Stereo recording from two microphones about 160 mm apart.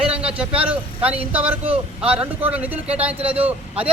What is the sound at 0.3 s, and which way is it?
A man's voice, 10° right (ahead or behind).